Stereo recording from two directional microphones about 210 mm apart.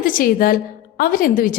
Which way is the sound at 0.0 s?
40° left (ahead or behind).